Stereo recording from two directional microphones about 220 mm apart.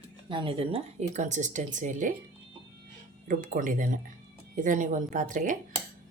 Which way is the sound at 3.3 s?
35° right (ahead or behind).